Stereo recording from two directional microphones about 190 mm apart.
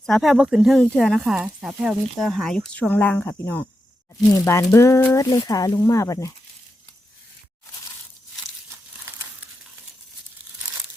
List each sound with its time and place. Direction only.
0.0 s speech: centre (ahead or behind); by 6.3 s 15° left (ahead or behind)